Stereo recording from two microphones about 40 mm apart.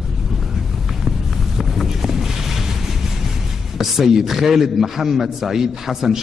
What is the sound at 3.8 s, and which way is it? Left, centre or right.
A man's voice, centre.